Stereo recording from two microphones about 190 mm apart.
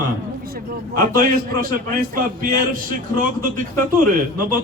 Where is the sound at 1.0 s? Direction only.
45° right (ahead or behind).